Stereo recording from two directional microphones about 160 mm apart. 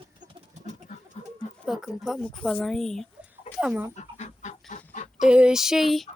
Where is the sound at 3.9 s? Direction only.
45° left (ahead or behind).